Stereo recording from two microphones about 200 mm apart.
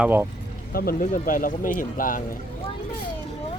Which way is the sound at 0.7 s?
50° left (ahead or behind).